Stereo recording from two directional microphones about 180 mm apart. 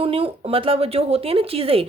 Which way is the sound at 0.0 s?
30° right (ahead or behind).